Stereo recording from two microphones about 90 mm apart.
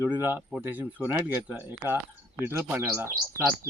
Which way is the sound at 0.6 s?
20° right (ahead or behind).